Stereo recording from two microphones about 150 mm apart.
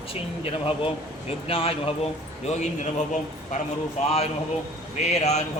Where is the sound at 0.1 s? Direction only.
40° left (ahead or behind).